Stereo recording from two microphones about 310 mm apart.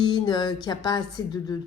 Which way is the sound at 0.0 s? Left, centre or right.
Centre.